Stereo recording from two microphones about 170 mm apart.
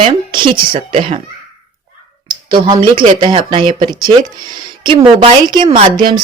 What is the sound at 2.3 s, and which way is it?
Speech, 25° right (ahead or behind).